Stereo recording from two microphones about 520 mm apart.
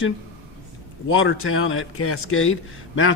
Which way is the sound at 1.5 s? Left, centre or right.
Left.